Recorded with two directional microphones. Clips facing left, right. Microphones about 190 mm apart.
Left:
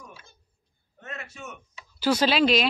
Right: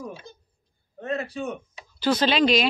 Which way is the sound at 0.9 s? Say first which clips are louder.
Right 12 dB; 35° right (ahead or behind).